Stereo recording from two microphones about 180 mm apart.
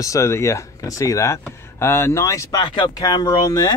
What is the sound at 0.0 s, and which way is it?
Speech, 15° left (ahead or behind).